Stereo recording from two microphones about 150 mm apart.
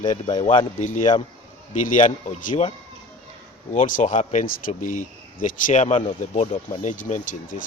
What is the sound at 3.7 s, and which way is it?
Speech, 60° left (ahead or behind).